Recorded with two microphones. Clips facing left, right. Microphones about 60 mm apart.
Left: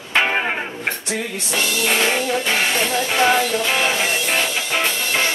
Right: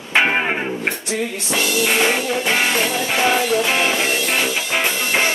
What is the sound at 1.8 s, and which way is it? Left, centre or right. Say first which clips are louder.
Music: right 1 dB; centre.